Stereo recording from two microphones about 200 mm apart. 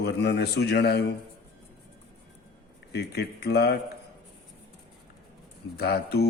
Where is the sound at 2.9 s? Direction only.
55° left (ahead or behind).